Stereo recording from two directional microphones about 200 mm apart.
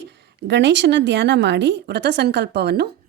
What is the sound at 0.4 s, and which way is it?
A woman's voice, 60° right (ahead or behind).